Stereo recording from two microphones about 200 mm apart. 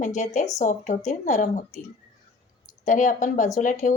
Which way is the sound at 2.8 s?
40° left (ahead or behind).